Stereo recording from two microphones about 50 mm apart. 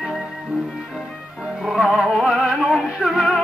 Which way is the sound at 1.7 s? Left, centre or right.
Centre.